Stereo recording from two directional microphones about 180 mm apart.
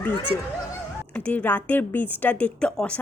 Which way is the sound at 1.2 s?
10° left (ahead or behind).